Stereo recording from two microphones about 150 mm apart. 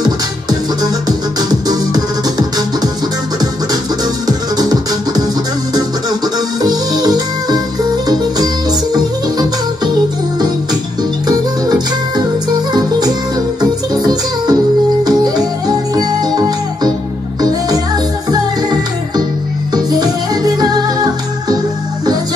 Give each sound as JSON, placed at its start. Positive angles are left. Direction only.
{"t": 1.0, "sound": "music", "side_deg": -25}
{"t": 4.3, "sound": "music", "side_deg": -25}
{"t": 6.6, "sound": "music", "side_deg": -25}
{"t": 11.2, "sound": "music", "side_deg": -25}
{"t": 13.6, "sound": "music", "side_deg": -25}
{"t": 18.3, "sound": "music", "side_deg": -25}